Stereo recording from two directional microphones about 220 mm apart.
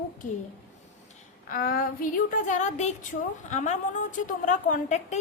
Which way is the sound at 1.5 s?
40° left (ahead or behind).